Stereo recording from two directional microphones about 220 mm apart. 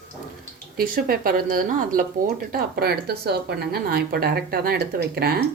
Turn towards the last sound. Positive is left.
turn(degrees=-45)  # may be behind; listen again after turning